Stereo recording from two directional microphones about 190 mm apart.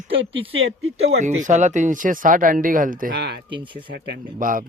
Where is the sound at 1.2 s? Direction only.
40° right (ahead or behind).